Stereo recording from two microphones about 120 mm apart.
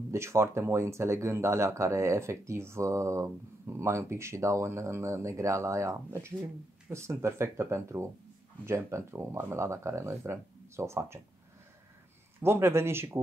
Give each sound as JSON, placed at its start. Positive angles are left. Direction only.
{"t": 0.1, "sound": "speech", "side_deg": -25}
{"t": 12.4, "sound": "speech", "side_deg": -20}